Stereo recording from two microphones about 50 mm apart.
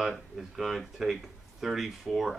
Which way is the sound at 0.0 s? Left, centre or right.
Centre.